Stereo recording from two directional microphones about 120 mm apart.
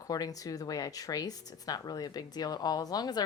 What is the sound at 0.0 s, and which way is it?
Speech, 30° left (ahead or behind).